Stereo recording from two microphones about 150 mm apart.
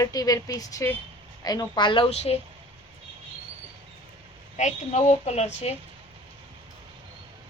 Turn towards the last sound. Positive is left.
turn(degrees=45)  # may be behind; listen again after turning